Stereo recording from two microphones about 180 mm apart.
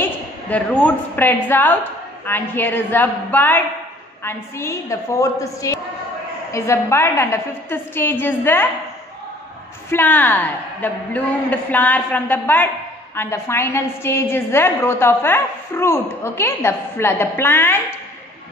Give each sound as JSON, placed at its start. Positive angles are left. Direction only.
{"t": 0.5, "sound": "a woman's voice", "side_deg": 10}
{"t": 9.8, "sound": "a woman's voice", "side_deg": 10}